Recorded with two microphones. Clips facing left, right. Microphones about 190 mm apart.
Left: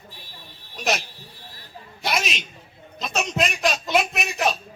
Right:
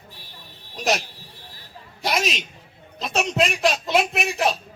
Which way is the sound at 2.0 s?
35° right (ahead or behind).